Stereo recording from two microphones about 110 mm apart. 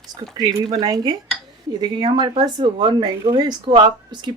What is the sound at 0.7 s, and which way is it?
Speech, 35° right (ahead or behind).